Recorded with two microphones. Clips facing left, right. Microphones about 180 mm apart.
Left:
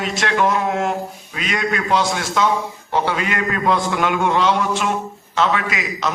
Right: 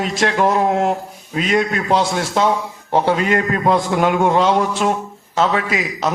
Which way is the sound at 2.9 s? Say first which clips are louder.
Right 5 dB; 45° right (ahead or behind).